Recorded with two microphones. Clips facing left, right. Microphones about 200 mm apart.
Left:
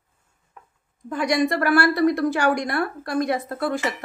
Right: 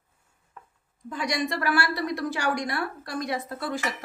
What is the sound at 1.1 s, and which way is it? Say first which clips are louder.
A woman's voice: left 7 dB; 55° left (ahead or behind).